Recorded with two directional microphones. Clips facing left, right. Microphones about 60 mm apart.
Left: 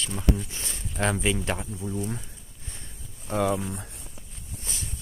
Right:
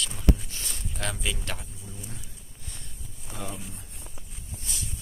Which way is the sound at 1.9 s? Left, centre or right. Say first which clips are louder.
Left 13 dB; left.